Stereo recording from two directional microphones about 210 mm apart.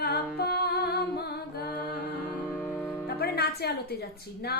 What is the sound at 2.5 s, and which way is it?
Music, 5° left (ahead or behind).